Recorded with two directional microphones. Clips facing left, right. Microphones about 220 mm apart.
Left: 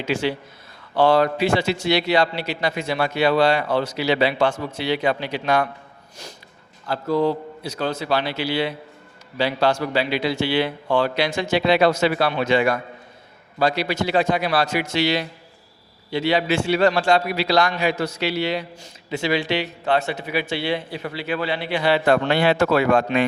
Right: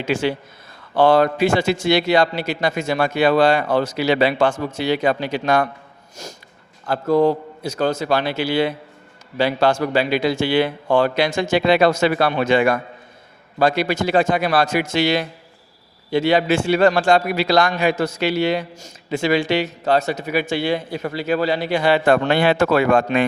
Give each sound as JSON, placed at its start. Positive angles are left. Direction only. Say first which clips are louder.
{"t": 0.0, "sound": "a man's voice", "louder": "right 2 dB", "side_deg": -50}
{"t": 6.8, "sound": "a man's voice", "louder": "right 4 dB", "side_deg": -50}